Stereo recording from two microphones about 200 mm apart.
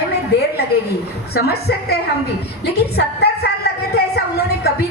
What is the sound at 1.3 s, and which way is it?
Speech, 55° left (ahead or behind).